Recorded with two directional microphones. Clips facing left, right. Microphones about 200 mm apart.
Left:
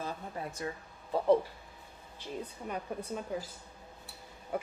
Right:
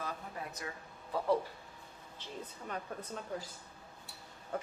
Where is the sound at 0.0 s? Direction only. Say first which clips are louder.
Left 3 dB; 30° left (ahead or behind).